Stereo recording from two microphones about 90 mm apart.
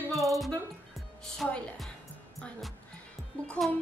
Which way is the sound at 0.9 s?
Centre (ahead or behind).